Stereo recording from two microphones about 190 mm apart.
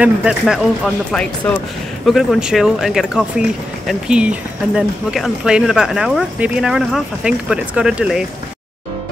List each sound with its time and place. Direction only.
0.0 s speech: 5° right (ahead or behind)